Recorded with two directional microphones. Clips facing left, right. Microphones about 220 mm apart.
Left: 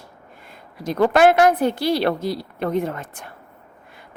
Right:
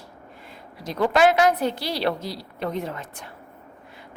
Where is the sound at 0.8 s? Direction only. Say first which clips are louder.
Left 4 dB; 50° left (ahead or behind).